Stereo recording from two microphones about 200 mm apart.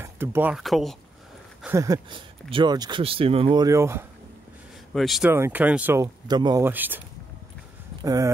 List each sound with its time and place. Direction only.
0.0 s speech: 10° right (ahead or behind)
1.6 s speech: 15° right (ahead or behind)
4.9 s speech: centre (ahead or behind)
6.2 s speech: 20° right (ahead or behind)
8.0 s speech: 15° right (ahead or behind)